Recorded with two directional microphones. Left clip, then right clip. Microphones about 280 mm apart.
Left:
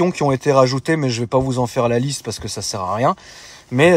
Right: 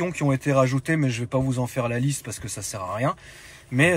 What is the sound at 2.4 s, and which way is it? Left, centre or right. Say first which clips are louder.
Speech: left 8 dB; left.